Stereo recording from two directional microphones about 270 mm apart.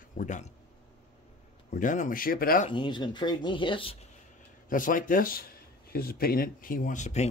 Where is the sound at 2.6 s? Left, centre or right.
Centre.